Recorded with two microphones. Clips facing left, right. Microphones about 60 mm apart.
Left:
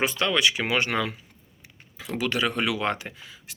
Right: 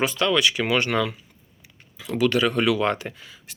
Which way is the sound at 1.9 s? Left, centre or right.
Left.